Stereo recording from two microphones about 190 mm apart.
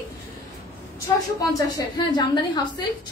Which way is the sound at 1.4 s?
20° left (ahead or behind).